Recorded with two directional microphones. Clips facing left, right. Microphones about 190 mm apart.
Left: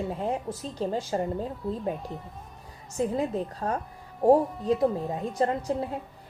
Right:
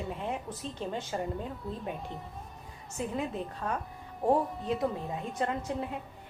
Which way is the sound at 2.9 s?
35° left (ahead or behind).